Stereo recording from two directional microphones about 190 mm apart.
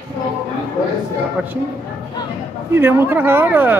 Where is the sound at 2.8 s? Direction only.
10° right (ahead or behind).